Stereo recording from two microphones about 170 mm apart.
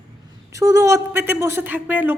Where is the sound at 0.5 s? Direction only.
20° right (ahead or behind).